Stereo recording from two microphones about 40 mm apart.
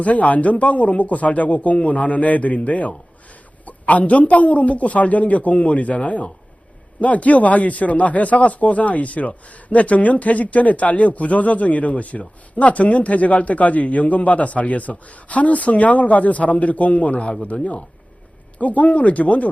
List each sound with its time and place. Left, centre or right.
0.0 s speech: left